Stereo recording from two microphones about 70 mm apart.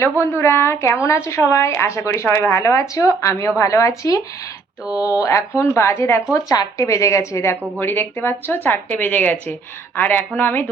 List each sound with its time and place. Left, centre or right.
0.0 s a woman's voice: left
6.3 s a woman's voice: left
7.8 s speech: left